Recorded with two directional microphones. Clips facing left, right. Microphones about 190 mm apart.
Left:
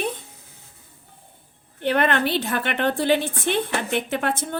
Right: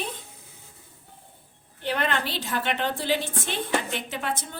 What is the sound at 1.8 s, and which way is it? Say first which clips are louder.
A woman's voice: left 6 dB; 60° left (ahead or behind).